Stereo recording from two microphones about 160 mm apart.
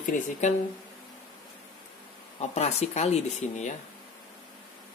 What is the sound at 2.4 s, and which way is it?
Speech, 45° left (ahead or behind).